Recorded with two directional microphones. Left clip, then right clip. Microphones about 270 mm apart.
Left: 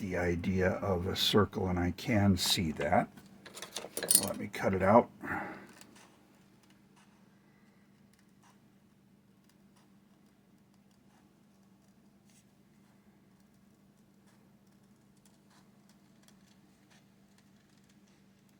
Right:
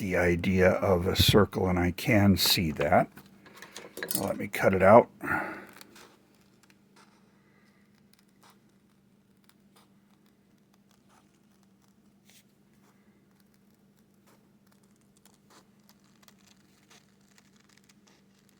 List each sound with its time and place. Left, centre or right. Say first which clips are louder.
0.0 s speech: right 7 dB; right
4.3 s speech: right 8 dB; right